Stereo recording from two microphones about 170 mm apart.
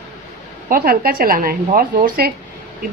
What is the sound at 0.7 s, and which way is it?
A woman's voice, 60° right (ahead or behind).